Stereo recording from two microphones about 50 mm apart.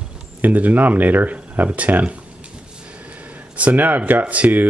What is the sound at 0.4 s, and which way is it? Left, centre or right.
Speech, right.